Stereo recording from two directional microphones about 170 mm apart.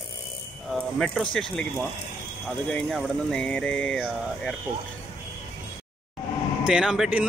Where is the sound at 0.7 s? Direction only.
Centre (ahead or behind).